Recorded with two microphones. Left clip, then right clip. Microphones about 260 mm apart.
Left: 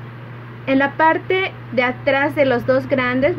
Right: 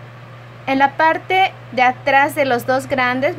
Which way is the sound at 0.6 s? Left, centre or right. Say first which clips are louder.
Right 1 dB; right.